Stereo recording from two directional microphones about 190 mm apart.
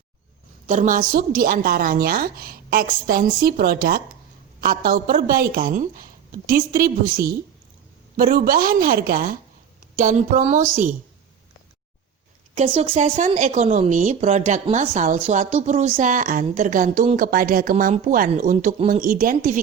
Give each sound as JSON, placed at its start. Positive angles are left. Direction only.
{"t": 0.7, "sound": "a woman's voice", "side_deg": -45}
{"t": 12.5, "sound": "a woman's voice", "side_deg": -30}
{"t": 13.1, "sound": "a woman's voice", "side_deg": -40}